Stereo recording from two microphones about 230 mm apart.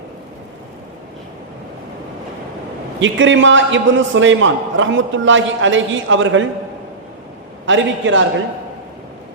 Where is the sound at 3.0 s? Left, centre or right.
Right.